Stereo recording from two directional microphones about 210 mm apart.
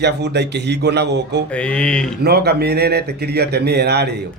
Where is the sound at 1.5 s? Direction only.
5° left (ahead or behind).